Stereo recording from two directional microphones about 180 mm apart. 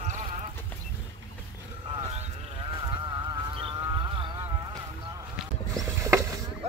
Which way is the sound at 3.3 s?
25° right (ahead or behind).